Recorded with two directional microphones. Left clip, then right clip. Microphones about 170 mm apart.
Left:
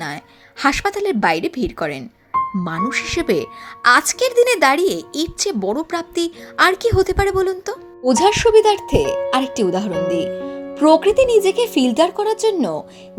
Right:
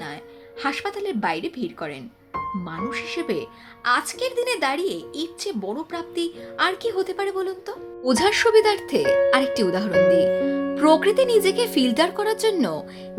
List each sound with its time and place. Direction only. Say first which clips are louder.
0.6 s speech: left 8 dB; 40° left (ahead or behind)
8.0 s speech: left 5 dB; 10° left (ahead or behind)